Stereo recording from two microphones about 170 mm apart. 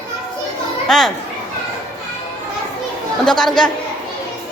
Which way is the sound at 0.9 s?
Centre (ahead or behind).